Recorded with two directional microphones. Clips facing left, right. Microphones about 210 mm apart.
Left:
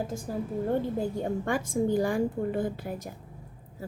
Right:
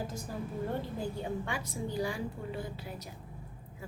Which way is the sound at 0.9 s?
45° left (ahead or behind).